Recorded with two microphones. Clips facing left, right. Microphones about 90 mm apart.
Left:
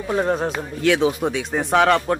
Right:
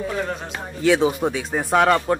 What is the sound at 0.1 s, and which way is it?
Speech, 35° left (ahead or behind).